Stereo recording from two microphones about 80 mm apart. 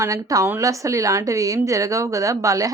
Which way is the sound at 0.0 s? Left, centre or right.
Right.